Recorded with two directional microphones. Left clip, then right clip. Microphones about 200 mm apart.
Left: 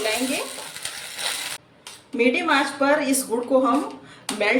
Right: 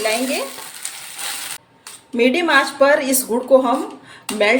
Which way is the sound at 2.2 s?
55° right (ahead or behind).